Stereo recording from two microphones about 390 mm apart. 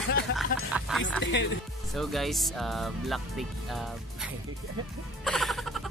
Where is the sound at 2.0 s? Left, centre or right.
Centre.